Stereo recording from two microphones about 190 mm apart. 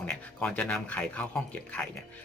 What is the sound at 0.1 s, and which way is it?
Speech, 5° left (ahead or behind).